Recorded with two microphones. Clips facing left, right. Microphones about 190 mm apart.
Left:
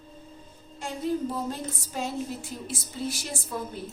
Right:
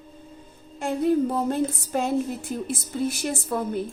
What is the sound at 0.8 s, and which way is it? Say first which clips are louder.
A woman's voice: right 7 dB; 60° right (ahead or behind).